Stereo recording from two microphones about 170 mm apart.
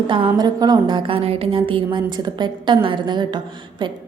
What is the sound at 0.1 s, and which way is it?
A woman's voice, 25° right (ahead or behind).